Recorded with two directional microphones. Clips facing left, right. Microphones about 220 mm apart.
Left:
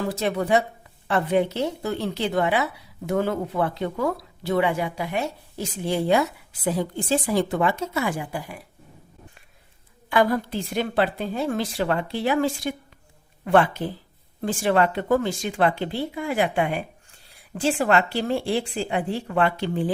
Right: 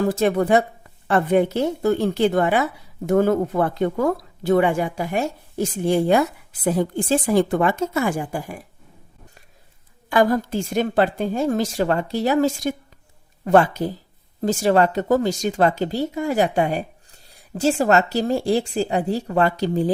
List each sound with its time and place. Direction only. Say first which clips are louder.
0.0 s a woman's voice: right 6 dB; 50° right (ahead or behind)
10.1 s a woman's voice: right 3 dB; 45° right (ahead or behind)